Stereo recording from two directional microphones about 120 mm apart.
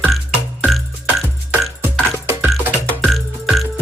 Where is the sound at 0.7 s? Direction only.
Centre (ahead or behind).